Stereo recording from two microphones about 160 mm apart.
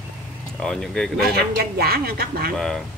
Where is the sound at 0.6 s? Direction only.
5° left (ahead or behind).